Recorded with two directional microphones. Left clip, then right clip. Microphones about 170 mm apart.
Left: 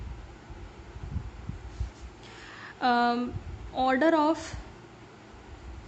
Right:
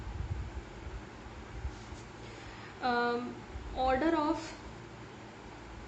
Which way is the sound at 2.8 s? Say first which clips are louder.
Left 6 dB; 60° left (ahead or behind).